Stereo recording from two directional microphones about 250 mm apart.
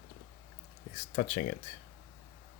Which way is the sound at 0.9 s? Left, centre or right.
Left.